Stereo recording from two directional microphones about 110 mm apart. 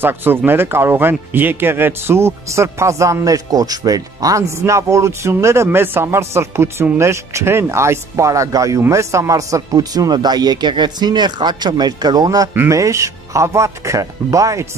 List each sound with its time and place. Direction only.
0.0 s speech: 20° right (ahead or behind)